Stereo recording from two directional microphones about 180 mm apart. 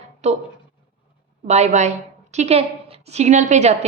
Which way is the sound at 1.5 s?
40° right (ahead or behind).